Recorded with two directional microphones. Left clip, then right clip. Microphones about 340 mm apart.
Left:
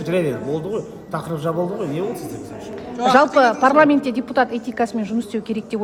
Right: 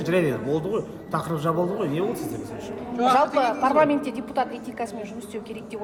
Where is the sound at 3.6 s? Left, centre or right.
Left.